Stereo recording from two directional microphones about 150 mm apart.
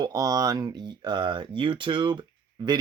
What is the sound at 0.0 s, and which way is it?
Speech, 25° right (ahead or behind).